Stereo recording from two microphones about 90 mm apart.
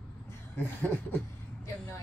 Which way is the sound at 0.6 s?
20° left (ahead or behind).